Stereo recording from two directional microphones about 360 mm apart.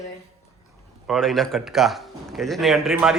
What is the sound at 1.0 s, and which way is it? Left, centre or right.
A man's voice, centre.